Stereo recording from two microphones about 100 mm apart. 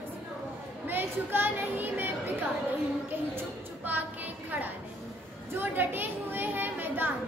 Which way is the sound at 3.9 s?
20° right (ahead or behind).